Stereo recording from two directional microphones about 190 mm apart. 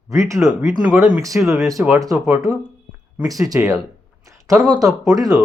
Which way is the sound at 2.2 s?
15° right (ahead or behind).